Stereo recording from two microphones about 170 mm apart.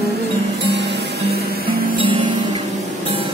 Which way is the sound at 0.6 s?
85° right.